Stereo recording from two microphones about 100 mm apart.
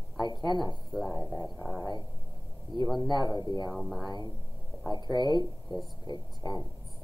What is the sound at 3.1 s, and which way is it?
Speech, 45° left (ahead or behind).